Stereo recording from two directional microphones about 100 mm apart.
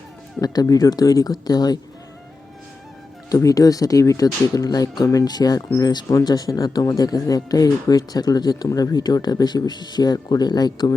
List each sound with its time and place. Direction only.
0.4 s speech: 40° left (ahead or behind)
3.2 s speech: 35° left (ahead or behind)